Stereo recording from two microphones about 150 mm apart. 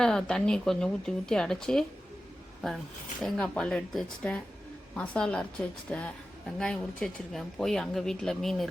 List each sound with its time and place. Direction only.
0.0 s speech: 5° left (ahead or behind)
3.2 s speech: 5° left (ahead or behind)